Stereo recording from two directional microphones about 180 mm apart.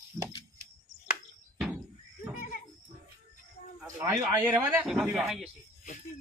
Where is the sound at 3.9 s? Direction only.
15° right (ahead or behind).